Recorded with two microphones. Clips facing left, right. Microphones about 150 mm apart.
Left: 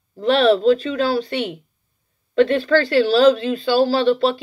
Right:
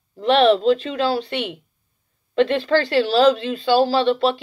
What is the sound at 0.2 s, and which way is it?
Speech, 40° left (ahead or behind).